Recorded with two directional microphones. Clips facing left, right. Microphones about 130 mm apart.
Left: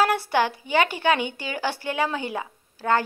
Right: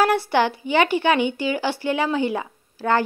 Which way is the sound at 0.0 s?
25° right (ahead or behind).